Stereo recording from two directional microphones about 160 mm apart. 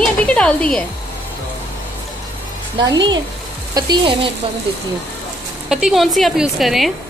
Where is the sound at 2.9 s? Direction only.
25° right (ahead or behind).